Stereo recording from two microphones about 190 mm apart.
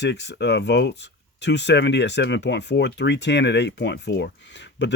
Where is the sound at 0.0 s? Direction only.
65° left (ahead or behind).